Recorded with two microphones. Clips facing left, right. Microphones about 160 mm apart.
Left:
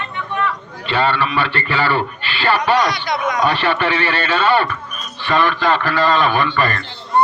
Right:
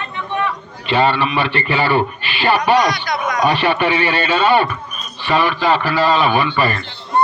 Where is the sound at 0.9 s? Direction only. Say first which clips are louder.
Right 2 dB; 15° right (ahead or behind).